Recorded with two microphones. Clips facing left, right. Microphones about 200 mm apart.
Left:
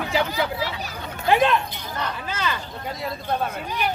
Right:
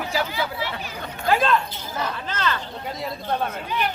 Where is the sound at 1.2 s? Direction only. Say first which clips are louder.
Left 1 dB; 20° left (ahead or behind); by 3.5 s centre (ahead or behind).